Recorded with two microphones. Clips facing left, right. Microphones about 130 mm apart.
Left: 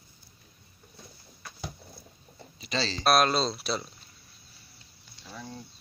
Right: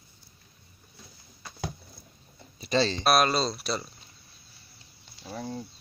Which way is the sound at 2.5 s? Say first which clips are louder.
Right 7 dB; 40° right (ahead or behind).